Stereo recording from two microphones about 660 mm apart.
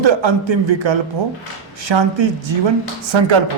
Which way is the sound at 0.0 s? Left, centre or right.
Right.